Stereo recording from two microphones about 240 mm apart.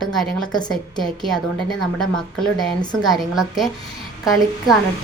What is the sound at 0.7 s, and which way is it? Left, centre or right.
Speech, centre.